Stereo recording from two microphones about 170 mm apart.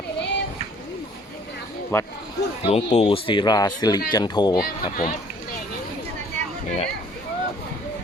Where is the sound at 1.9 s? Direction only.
15° left (ahead or behind).